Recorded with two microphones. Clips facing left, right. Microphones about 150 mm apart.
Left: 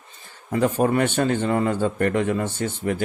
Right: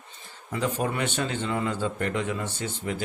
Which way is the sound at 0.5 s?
50° left (ahead or behind).